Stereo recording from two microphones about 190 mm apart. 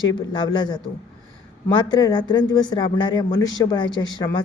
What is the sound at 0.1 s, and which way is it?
Speech, 25° left (ahead or behind).